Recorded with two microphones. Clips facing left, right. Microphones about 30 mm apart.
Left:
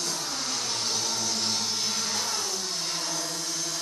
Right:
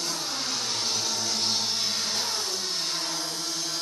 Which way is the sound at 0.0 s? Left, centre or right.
Right.